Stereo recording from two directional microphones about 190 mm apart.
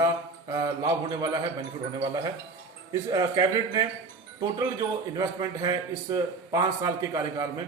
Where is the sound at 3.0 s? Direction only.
20° right (ahead or behind).